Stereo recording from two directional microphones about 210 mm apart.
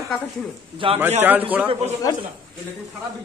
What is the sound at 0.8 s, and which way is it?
Speech, 25° right (ahead or behind).